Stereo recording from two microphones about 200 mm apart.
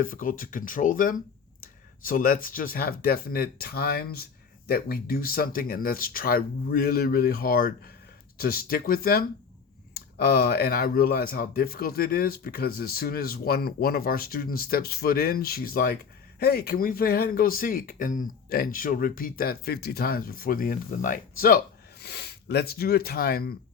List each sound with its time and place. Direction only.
0.0 s speech: 45° left (ahead or behind)